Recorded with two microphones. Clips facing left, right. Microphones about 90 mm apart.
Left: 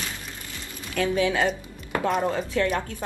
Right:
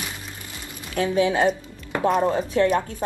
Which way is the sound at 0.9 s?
25° right (ahead or behind).